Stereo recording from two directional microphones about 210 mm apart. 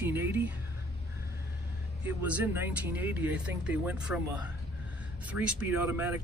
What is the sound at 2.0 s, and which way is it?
Speech, 10° right (ahead or behind).